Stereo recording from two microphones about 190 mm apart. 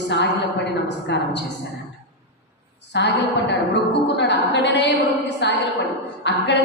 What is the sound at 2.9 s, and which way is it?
A man's voice, 65° left (ahead or behind).